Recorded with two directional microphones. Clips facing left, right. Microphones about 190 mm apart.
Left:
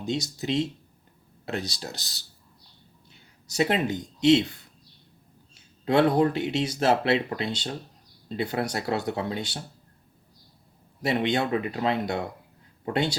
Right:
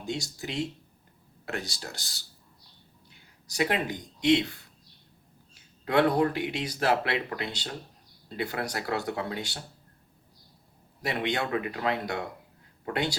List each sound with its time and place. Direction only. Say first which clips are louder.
0.0 s speech: left 5 dB; 20° left (ahead or behind)
3.5 s speech: left 4 dB; 25° left (ahead or behind)
5.8 s speech: left 3 dB; 25° left (ahead or behind)
11.0 s speech: left 5 dB; 25° left (ahead or behind)